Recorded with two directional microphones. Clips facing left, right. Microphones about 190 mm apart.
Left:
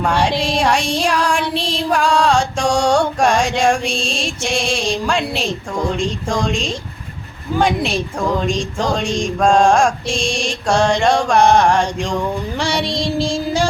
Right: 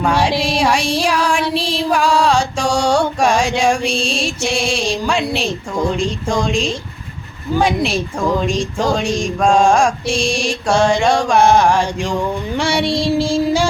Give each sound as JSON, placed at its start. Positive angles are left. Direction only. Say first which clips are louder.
{"t": 0.0, "sound": "music", "louder": "right 1 dB", "side_deg": -5}